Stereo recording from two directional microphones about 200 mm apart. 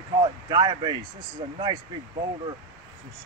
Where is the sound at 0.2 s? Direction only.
20° right (ahead or behind).